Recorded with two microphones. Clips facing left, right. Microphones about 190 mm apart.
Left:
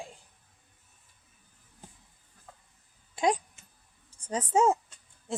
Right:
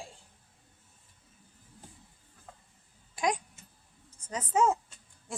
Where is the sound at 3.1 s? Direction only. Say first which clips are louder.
Left 4 dB; 30° left (ahead or behind).